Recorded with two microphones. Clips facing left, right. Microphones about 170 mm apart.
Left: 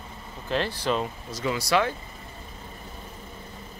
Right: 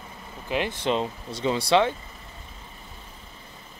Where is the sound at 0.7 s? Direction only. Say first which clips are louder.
Right 1 dB; 25° right (ahead or behind).